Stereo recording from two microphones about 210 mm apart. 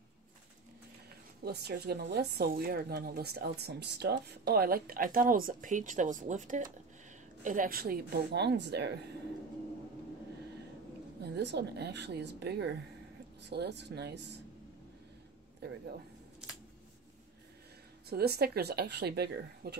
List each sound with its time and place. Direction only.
1.4 s speech: 50° right (ahead or behind)
11.1 s speech: 55° right (ahead or behind)
15.6 s speech: 50° right (ahead or behind)
18.1 s speech: 50° right (ahead or behind)